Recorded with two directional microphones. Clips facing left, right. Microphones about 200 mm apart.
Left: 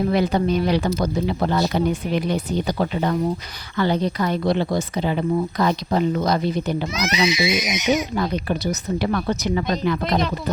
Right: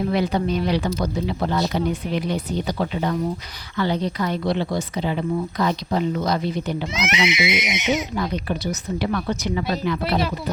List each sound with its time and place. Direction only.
0.1 s speech: 45° left (ahead or behind)
7.1 s speech: 20° right (ahead or behind)
8.1 s speech: 45° left (ahead or behind)